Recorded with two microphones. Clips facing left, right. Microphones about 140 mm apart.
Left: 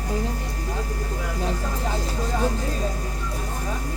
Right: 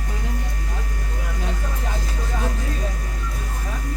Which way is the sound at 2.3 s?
30° left (ahead or behind).